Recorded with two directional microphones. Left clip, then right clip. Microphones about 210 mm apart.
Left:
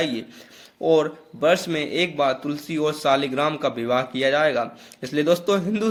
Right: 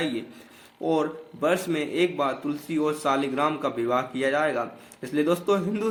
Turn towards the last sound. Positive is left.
turn(degrees=35)  # may be behind; listen again after turning